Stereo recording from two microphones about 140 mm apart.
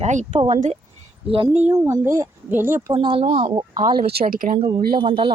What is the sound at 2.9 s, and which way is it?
Speech, 40° right (ahead or behind).